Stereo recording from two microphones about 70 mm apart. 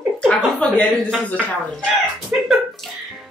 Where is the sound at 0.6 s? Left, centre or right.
Centre.